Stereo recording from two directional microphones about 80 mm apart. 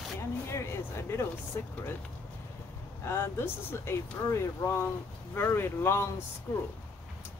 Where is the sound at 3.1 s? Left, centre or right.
Left.